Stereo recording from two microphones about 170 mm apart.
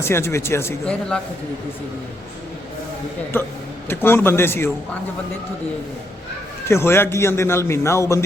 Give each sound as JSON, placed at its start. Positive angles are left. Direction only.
{"t": 0.0, "sound": "a man's voice", "side_deg": 15}
{"t": 3.3, "sound": "a man's voice", "side_deg": 15}
{"t": 6.7, "sound": "a man's voice", "side_deg": 15}